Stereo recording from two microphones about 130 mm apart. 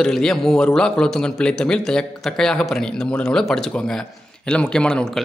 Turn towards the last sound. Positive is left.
turn(degrees=5)  # may be behind; listen again after turning